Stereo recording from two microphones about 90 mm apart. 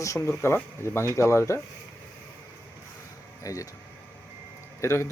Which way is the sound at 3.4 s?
40° left (ahead or behind).